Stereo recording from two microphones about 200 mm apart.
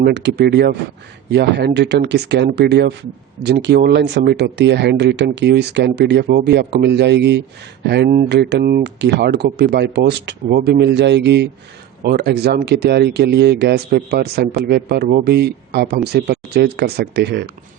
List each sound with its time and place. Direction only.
0.0 s speech: 60° right (ahead or behind)